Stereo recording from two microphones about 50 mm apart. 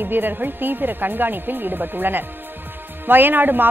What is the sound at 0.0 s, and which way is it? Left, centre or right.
A woman's voice, right.